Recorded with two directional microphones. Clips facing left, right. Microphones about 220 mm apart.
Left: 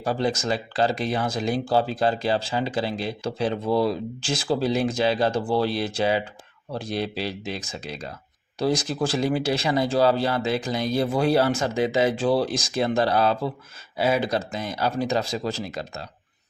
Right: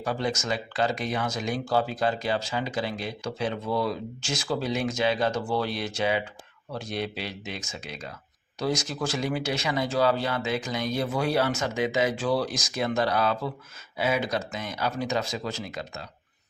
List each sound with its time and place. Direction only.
0.0 s speech: 35° left (ahead or behind)